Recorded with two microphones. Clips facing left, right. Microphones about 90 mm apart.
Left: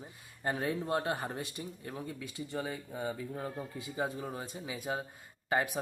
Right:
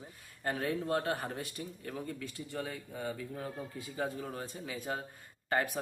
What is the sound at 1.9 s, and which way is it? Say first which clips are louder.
A man's voice: right 1 dB; 10° left (ahead or behind).